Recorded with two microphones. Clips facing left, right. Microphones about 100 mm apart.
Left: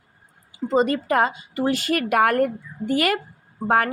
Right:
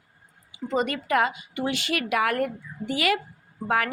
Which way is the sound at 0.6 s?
30° left (ahead or behind).